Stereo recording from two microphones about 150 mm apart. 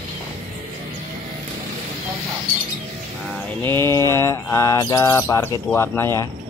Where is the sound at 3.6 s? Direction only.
15° left (ahead or behind).